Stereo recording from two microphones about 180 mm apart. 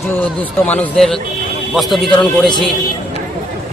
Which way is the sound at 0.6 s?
5° left (ahead or behind).